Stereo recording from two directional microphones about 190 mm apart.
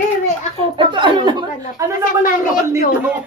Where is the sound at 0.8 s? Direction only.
25° right (ahead or behind).